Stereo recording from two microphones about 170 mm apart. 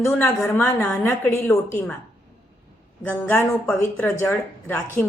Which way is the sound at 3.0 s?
10° left (ahead or behind).